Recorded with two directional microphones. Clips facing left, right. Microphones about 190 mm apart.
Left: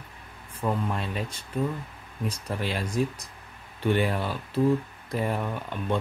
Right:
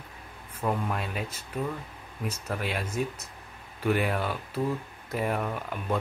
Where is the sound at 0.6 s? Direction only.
5° right (ahead or behind).